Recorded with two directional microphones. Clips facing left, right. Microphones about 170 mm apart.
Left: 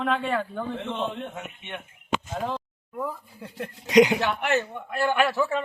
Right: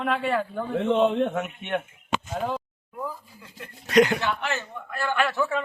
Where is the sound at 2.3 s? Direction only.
5° right (ahead or behind).